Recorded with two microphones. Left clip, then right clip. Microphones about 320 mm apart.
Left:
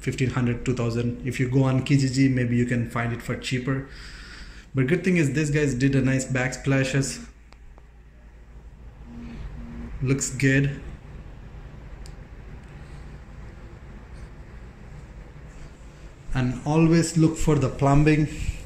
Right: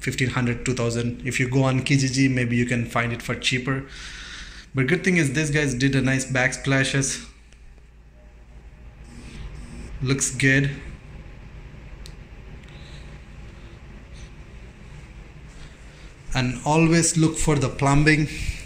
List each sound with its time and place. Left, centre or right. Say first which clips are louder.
0.0 s speech: right 2 dB; centre
10.0 s speech: right 3 dB; centre
16.3 s speech: right 3 dB; centre